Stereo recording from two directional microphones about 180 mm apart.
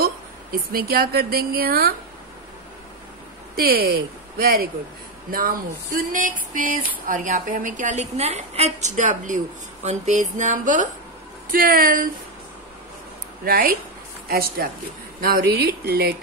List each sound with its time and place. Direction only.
0.0 s speech: 55° right (ahead or behind)
3.5 s speech: 60° right (ahead or behind)
5.9 s speech: 50° right (ahead or behind)
13.5 s speech: 55° right (ahead or behind)